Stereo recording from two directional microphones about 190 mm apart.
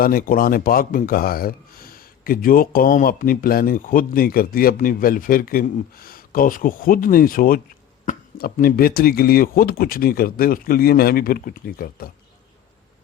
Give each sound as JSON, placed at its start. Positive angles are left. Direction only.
{"t": 0.0, "sound": "speech", "side_deg": 50}